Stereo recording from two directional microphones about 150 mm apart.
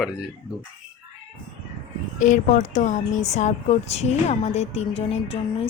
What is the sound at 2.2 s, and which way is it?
Speech, 55° left (ahead or behind).